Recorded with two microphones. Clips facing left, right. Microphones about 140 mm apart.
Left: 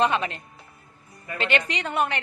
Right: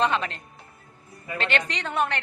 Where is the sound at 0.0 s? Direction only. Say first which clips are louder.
Left 1 dB; 10° left (ahead or behind).